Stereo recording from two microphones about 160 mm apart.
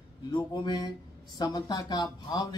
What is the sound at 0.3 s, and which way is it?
Speech, 25° left (ahead or behind).